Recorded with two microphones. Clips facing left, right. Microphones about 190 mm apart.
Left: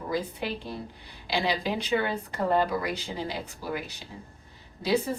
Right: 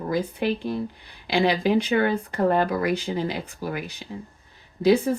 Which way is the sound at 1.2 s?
55° right (ahead or behind).